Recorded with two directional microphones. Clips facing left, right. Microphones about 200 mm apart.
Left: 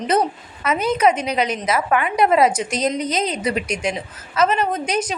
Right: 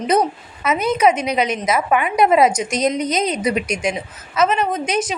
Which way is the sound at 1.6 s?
15° right (ahead or behind).